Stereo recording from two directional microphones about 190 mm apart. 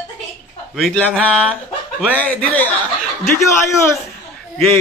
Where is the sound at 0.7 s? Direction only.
5° left (ahead or behind).